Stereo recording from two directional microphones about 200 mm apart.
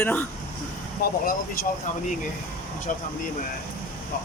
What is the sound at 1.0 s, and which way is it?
Speech, 50° left (ahead or behind).